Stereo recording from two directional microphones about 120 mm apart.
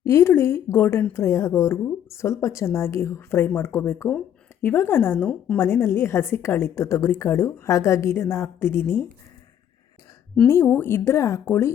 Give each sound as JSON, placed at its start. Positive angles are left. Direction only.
{"t": 0.0, "sound": "a woman's voice", "side_deg": 20}
{"t": 10.4, "sound": "a woman's voice", "side_deg": 20}